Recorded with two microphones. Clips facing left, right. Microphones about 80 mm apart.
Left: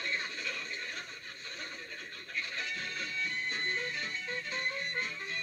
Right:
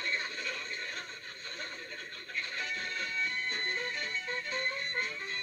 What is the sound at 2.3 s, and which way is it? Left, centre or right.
Music, right.